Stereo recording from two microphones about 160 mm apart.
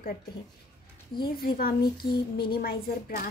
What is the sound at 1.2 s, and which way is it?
A woman's voice, 70° left (ahead or behind).